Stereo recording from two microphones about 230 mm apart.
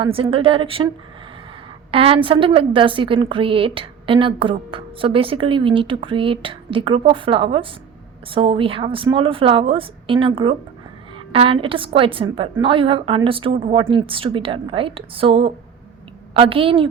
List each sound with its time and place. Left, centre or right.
0.0 s a woman's voice: right
1.9 s a woman's voice: right